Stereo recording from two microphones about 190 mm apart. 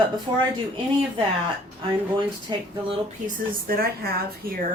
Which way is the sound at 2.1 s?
25° right (ahead or behind).